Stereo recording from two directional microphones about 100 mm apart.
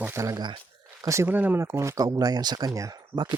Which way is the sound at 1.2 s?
20° right (ahead or behind).